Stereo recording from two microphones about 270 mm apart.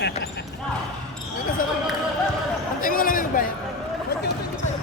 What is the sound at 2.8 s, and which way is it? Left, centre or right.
Speech, left.